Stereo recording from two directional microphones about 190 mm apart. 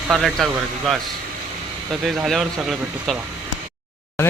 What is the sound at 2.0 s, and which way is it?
Speech, centre (ahead or behind).